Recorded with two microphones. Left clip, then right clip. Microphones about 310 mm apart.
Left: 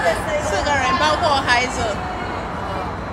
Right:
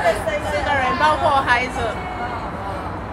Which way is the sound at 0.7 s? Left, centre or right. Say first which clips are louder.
Right 1 dB; centre.